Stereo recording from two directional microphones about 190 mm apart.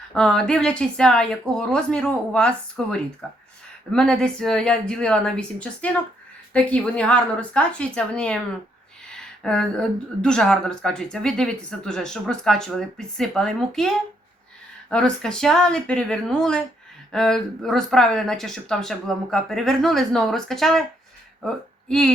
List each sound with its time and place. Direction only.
0.1 s speech: 5° left (ahead or behind)
9.4 s speech: 5° left (ahead or behind)